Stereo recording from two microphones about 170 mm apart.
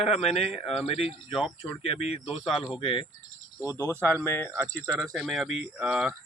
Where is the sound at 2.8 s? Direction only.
30° left (ahead or behind).